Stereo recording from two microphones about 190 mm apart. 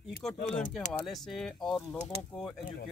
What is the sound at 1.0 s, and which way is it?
Speech, centre (ahead or behind).